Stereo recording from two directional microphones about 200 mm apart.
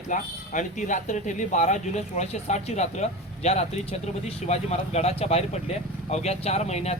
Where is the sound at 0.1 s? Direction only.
40° left (ahead or behind).